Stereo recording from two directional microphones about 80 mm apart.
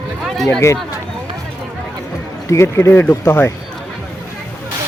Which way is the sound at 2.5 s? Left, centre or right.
Left.